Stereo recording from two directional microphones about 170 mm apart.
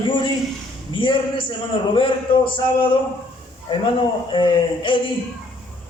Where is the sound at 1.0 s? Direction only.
30° left (ahead or behind).